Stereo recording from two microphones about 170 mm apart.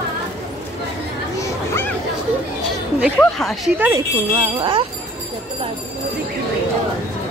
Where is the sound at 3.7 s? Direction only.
10° right (ahead or behind).